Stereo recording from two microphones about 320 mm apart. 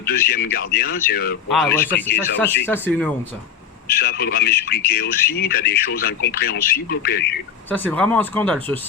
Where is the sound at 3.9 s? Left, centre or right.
Left.